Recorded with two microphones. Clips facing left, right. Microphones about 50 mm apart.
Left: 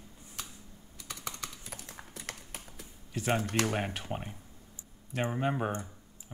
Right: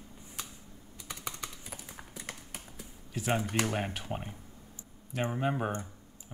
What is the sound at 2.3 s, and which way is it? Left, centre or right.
Typing, centre.